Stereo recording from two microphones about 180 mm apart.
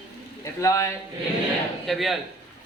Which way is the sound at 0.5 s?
15° left (ahead or behind).